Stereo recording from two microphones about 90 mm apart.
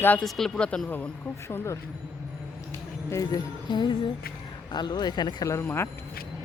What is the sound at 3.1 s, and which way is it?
Speech, 45° left (ahead or behind).